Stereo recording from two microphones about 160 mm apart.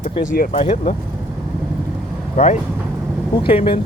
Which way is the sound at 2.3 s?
45° left (ahead or behind).